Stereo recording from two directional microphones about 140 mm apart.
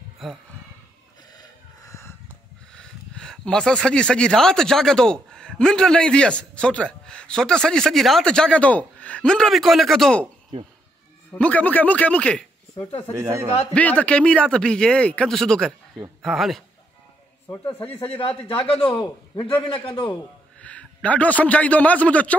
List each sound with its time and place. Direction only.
1.4 s snort: 20° left (ahead or behind)
2.7 s speech: 5° left (ahead or behind)
11.3 s speech: 10° left (ahead or behind)
13.2 s speech: 20° right (ahead or behind)
13.7 s speech: 10° left (ahead or behind)
17.5 s speech: 15° left (ahead or behind)
18.0 s a man's voice: 45° left (ahead or behind)
18.9 s speech: 10° left (ahead or behind)
20.6 s a man's voice: 10° left (ahead or behind)